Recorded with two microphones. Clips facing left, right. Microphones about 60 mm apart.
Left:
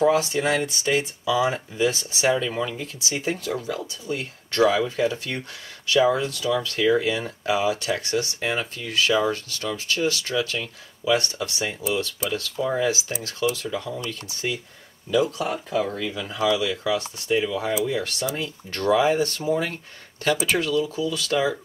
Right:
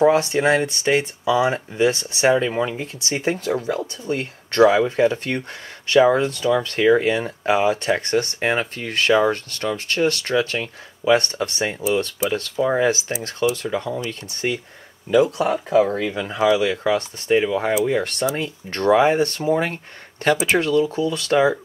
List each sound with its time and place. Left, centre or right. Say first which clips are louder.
0.0 s speech: right 4 dB; right
2.3 s speech: right 5 dB; right